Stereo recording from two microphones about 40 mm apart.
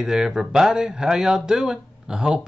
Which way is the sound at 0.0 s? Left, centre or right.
Centre.